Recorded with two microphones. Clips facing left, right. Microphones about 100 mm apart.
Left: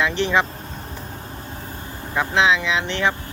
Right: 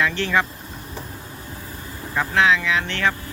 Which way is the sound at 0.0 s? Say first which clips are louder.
Left 1 dB; 20° left (ahead or behind).